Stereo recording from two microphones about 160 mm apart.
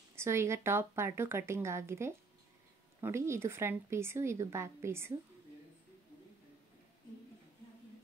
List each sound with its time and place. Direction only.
0.1 s speech: 15° right (ahead or behind)